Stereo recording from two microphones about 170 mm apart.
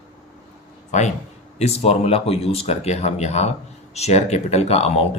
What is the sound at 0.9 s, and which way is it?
Speech, 45° left (ahead or behind).